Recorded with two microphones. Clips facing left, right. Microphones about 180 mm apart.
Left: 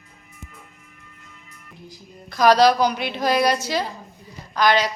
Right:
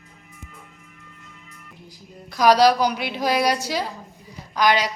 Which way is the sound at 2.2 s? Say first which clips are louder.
Even; 10° right (ahead or behind).